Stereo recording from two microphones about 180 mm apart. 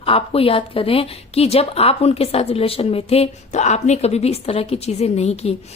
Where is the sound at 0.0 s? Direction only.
30° left (ahead or behind).